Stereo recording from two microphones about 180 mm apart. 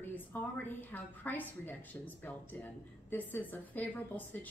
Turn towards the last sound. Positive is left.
turn(degrees=10)  # may be behind; listen again after turning